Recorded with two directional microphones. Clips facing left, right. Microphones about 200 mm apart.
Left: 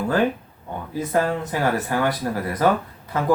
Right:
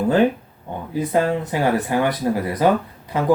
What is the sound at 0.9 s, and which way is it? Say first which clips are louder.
Speech: right 3 dB; 20° right (ahead or behind).